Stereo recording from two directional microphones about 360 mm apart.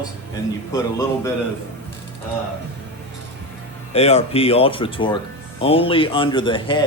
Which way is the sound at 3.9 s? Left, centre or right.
Centre.